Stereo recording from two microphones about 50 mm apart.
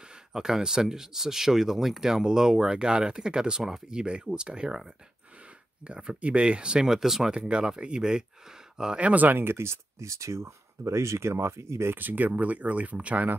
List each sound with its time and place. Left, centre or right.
0.0 s speech: centre
7.3 s speech: centre
9.0 s speech: right
11.9 s speech: right